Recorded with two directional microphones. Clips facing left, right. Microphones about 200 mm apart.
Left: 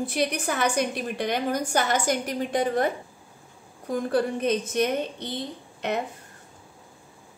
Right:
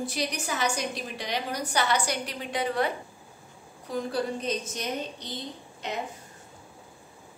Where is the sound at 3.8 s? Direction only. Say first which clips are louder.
Left 5 dB; 60° left (ahead or behind).